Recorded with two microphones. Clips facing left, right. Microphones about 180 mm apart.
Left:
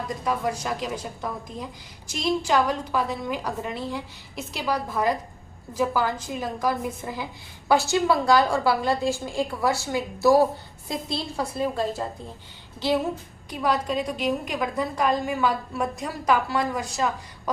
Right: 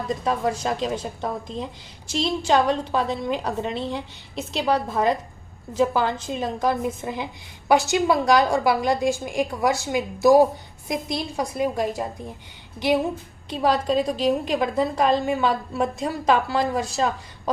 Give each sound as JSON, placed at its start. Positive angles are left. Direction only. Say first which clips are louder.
{"t": 0.1, "sound": "a woman's voice", "louder": "right 4 dB", "side_deg": -25}
{"t": 13.5, "sound": "speech", "louder": "right 4 dB", "side_deg": -30}